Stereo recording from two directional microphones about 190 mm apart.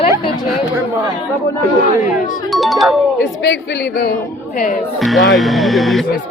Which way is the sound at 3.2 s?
65° left (ahead or behind).